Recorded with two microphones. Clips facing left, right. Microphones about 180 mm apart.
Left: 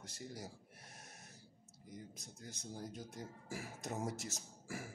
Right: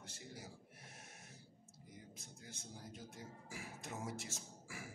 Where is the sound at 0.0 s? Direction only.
40° left (ahead or behind).